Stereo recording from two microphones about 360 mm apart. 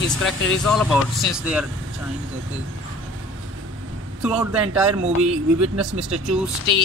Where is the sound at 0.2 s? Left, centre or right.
Centre.